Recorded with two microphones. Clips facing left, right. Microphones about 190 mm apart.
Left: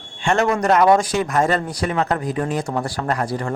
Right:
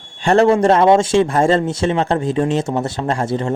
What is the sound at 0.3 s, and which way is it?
Speech, 30° right (ahead or behind).